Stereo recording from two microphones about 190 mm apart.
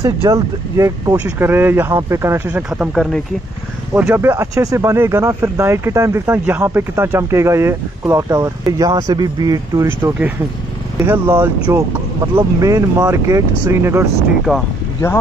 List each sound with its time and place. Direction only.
0.0 s speech: 15° right (ahead or behind); by 3.2 s centre (ahead or behind)
3.9 s speech: 10° right (ahead or behind)
14.5 s speech: centre (ahead or behind)